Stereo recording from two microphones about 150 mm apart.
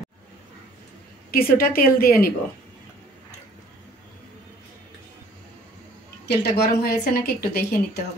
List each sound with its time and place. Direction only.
1.3 s a woman's voice: 80° left
6.2 s a woman's voice: 90° left